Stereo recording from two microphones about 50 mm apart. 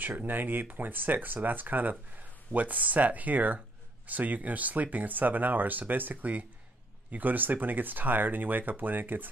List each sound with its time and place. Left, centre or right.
0.2 s speech: right